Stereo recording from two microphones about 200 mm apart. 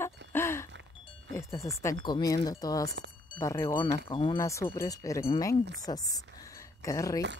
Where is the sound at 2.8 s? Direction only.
65° right (ahead or behind).